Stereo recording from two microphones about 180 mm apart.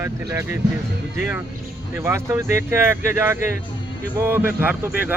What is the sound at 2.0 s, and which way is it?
Speech, 15° right (ahead or behind).